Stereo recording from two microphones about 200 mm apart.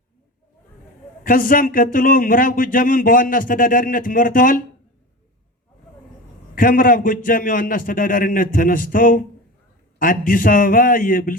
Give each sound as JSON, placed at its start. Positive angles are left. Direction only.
{"t": 1.2, "sound": "speech", "side_deg": 45}
{"t": 6.6, "sound": "speech", "side_deg": 45}